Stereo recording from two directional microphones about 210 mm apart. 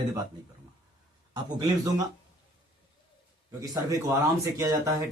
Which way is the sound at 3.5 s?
15° right (ahead or behind).